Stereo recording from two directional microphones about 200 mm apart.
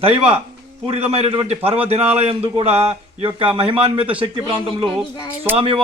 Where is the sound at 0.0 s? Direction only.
30° right (ahead or behind).